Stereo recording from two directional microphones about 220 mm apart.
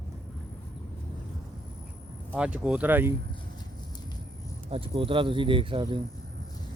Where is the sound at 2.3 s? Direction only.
5° right (ahead or behind).